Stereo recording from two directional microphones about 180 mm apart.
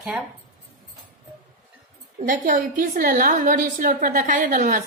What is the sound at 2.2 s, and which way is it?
A woman's voice, 50° right (ahead or behind).